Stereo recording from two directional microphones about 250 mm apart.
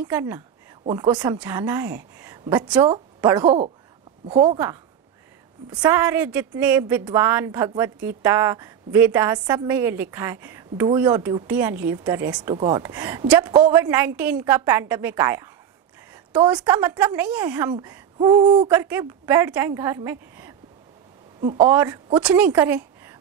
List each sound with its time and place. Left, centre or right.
0.0 s a woman's voice: centre
5.7 s a woman's voice: centre
18.1 s a woman's voice: centre
21.5 s speech: centre